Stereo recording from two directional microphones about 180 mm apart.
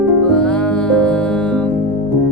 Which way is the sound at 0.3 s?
5° left (ahead or behind).